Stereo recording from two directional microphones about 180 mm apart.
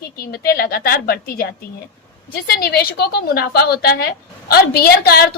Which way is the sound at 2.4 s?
60° left (ahead or behind).